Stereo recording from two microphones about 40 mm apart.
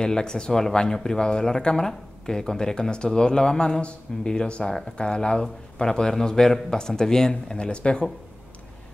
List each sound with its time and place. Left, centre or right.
0.0 s a man's voice: centre